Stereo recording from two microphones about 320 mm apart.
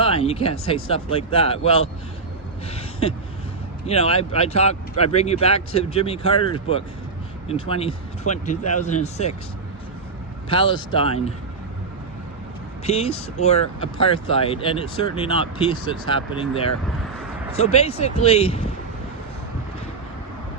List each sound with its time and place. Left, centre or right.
0.0 s speech: centre
2.7 s a sound: centre
3.8 s speech: centre
10.5 s speech: centre
12.8 s speech: centre